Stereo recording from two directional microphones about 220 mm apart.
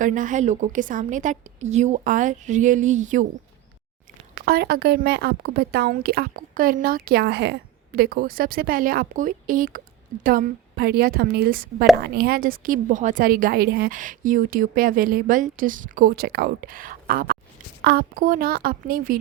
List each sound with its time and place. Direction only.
0.0 s a woman's voice: 35° right (ahead or behind)
4.4 s a woman's voice: 45° right (ahead or behind)